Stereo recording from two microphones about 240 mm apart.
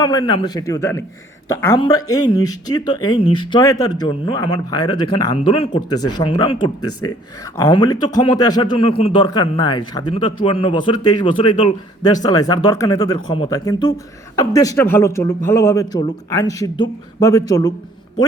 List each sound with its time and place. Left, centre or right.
0.0 s speech: centre